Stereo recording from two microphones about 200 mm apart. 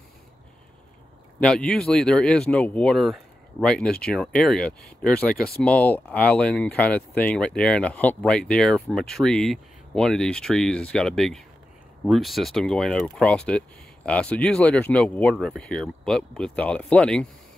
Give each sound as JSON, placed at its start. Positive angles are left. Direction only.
{"t": 1.4, "sound": "speech", "side_deg": 5}
{"t": 5.3, "sound": "speech", "side_deg": 50}
{"t": 5.6, "sound": "speech", "side_deg": 5}